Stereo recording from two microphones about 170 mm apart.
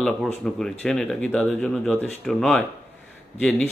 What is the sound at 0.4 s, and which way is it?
Speech, centre (ahead or behind).